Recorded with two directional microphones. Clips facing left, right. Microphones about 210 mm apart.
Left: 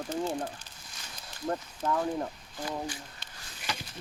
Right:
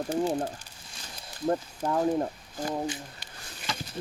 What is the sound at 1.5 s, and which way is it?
Speech, 30° right (ahead or behind).